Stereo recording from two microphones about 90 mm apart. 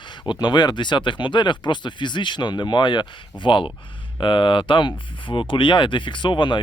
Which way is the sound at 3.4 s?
70° left (ahead or behind).